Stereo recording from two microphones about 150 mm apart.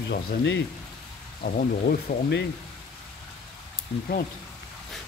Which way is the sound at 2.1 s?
90° left.